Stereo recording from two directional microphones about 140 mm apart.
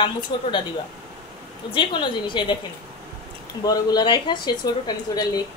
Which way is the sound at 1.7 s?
35° left (ahead or behind).